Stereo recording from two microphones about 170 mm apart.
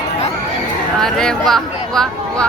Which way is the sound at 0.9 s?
5° left (ahead or behind).